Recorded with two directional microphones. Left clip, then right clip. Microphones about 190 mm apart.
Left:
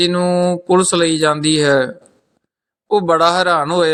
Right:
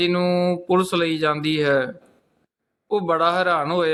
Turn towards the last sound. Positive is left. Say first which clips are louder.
# left 6 dB
turn(degrees=25)  # may be behind; listen again after turning